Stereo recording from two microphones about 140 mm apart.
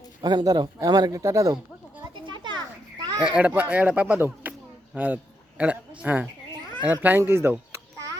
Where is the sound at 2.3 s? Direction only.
30° right (ahead or behind).